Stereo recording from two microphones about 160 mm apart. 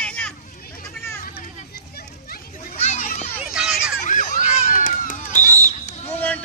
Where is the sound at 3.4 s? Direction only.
5° right (ahead or behind).